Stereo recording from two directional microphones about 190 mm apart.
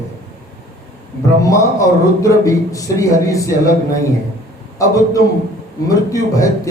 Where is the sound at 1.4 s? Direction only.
20° left (ahead or behind).